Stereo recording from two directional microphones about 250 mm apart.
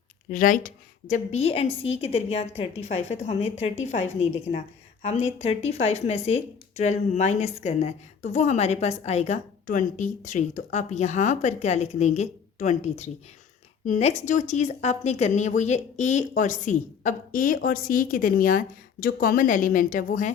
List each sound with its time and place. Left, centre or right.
0.3 s a woman's voice: left